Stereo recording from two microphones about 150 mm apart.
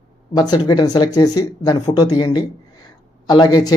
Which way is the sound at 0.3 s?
25° left (ahead or behind).